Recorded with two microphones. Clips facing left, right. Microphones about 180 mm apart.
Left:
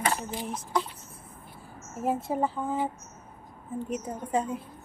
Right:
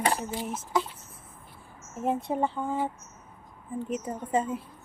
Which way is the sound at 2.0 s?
5° left (ahead or behind).